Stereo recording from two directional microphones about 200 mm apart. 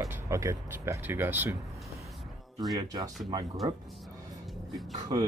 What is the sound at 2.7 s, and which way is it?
Speech, 20° right (ahead or behind).